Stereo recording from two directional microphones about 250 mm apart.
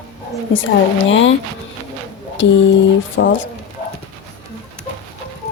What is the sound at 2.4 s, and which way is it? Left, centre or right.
A woman's voice, left.